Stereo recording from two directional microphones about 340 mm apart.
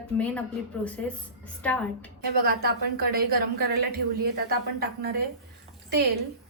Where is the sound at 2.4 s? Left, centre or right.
Right.